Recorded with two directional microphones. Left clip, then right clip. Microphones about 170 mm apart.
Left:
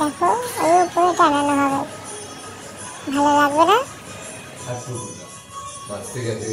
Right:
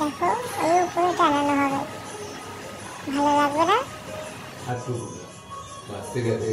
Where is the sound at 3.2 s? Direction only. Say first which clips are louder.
Left 5 dB; 20° left (ahead or behind).